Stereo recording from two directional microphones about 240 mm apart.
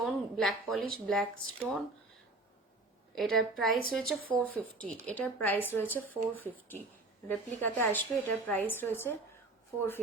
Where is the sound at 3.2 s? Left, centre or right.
Centre.